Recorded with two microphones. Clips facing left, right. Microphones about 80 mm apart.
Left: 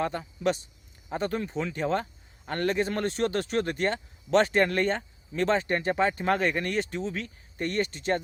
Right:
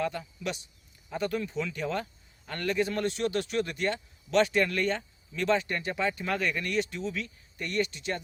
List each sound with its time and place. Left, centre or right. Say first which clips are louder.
0.0 s a man's voice: left 4 dB; left